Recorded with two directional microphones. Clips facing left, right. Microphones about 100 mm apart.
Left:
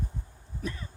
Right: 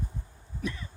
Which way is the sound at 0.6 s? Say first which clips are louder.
Right 1 dB; 40° left (ahead or behind).